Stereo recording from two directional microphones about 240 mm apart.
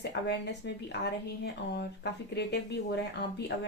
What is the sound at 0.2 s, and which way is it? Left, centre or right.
Speech, left.